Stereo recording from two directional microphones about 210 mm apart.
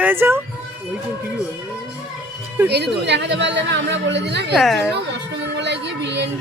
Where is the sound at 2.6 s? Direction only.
55° right (ahead or behind).